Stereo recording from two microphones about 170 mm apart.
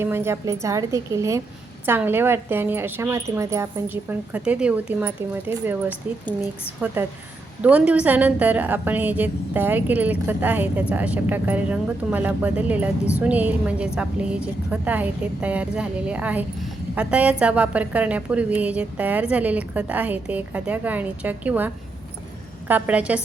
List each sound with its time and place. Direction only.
0.0 s a woman's voice: 15° right (ahead or behind)
22.7 s a woman's voice: 10° right (ahead or behind)